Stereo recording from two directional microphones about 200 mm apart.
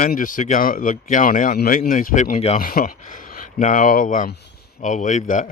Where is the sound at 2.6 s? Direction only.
45° left (ahead or behind).